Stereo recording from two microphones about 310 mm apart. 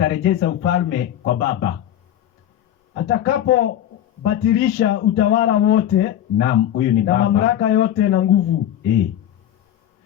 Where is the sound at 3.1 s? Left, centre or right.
Left.